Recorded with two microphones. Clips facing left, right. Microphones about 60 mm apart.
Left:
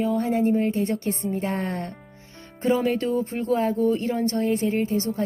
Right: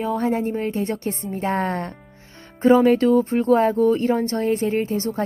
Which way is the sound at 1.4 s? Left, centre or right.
Right.